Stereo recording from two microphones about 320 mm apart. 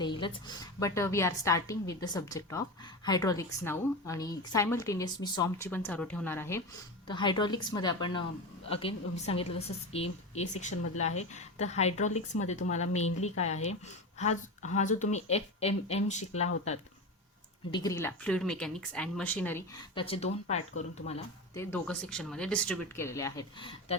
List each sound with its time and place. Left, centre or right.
0.0 s a woman's voice: centre
17.7 s a woman's voice: centre
21.5 s speech: centre